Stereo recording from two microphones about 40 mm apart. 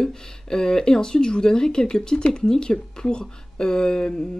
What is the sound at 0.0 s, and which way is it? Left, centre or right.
Speech, centre.